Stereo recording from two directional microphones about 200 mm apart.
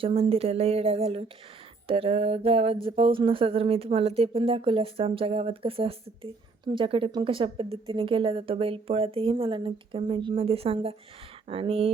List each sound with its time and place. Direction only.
0.0 s a woman's voice: 30° right (ahead or behind)